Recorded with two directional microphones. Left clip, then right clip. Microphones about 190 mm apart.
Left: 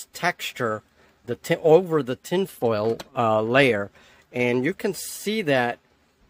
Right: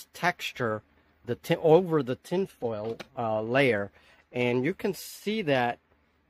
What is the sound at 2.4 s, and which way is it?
Speech, 25° left (ahead or behind).